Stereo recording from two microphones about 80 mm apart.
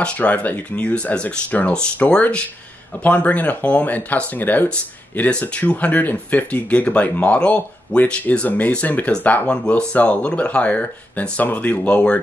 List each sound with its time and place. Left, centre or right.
0.0 s speech: centre